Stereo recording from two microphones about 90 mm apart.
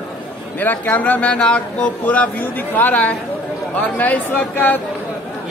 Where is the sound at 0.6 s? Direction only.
20° left (ahead or behind).